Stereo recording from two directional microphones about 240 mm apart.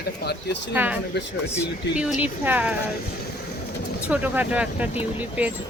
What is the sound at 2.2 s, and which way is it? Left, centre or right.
Speech, centre.